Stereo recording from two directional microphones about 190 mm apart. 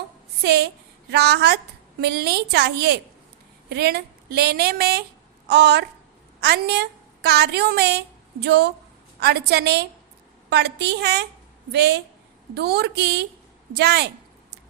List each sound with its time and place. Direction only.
0.4 s a woman's voice: 60° right (ahead or behind)